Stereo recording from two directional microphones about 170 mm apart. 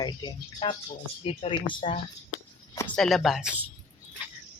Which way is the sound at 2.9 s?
Centre (ahead or behind).